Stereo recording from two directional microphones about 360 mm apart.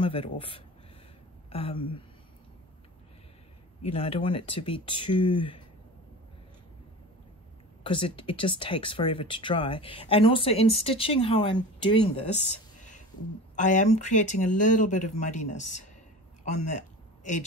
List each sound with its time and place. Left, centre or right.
0.0 s speech: centre
3.8 s speech: centre
7.8 s speech: centre
13.6 s speech: left
16.5 s a sound: centre